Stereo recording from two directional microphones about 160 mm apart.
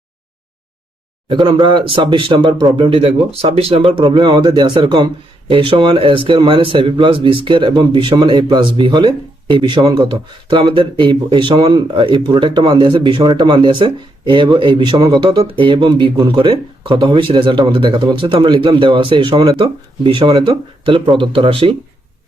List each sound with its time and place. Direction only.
1.3 s speech: 30° right (ahead or behind)